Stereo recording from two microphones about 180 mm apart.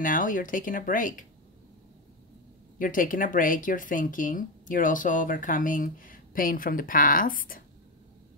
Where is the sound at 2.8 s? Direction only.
50° left (ahead or behind).